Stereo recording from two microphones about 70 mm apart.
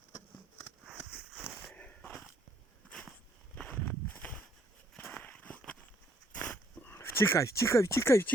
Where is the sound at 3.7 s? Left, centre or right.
Left.